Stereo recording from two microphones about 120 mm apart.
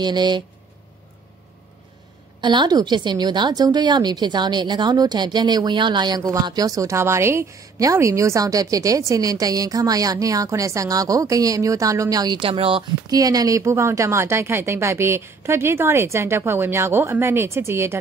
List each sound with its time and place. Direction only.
0.0 s a woman's voice: 35° right (ahead or behind)
2.4 s a woman's voice: 40° right (ahead or behind)
13.1 s a woman's voice: 30° right (ahead or behind)